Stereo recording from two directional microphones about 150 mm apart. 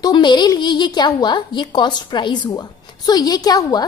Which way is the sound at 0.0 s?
30° left (ahead or behind).